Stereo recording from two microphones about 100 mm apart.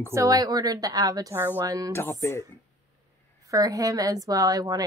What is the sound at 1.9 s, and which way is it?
Speech, 25° left (ahead or behind).